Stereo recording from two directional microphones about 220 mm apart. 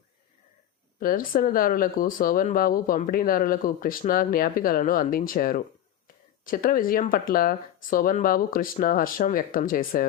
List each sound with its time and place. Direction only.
0.9 s speech: 40° left (ahead or behind)